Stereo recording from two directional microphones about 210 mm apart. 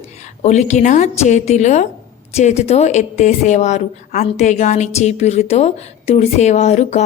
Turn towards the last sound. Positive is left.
turn(degrees=35)  # may be behind; listen again after turning